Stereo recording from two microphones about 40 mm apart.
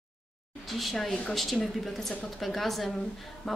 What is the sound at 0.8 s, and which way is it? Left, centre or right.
A woman's voice, centre.